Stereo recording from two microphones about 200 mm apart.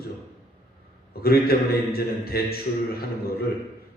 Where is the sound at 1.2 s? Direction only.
50° left (ahead or behind).